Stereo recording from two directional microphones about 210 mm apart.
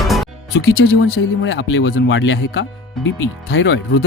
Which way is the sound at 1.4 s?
60° left (ahead or behind).